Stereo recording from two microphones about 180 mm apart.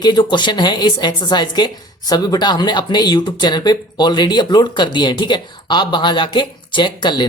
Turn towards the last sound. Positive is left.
turn(degrees=25)  # may be behind; listen again after turning